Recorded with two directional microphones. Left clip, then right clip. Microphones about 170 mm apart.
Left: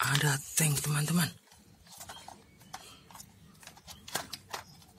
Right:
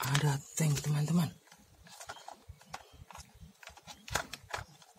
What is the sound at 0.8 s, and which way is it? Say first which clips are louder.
Speech: left 4 dB; 5° right (ahead or behind).